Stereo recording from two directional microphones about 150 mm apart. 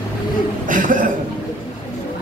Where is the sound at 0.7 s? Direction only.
60° right (ahead or behind).